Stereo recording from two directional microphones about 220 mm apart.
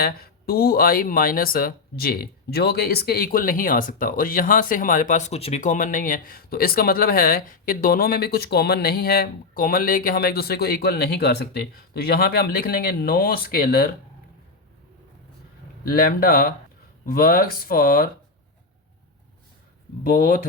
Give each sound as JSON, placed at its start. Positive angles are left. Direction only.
{"t": 0.0, "sound": "speech", "side_deg": 45}
{"t": 15.8, "sound": "speech", "side_deg": 40}
{"t": 20.1, "sound": "speech", "side_deg": 40}